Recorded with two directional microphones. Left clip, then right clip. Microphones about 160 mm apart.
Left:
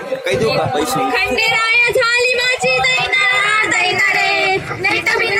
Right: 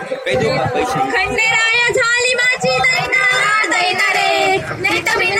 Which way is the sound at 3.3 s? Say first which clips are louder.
Even; 35° right (ahead or behind).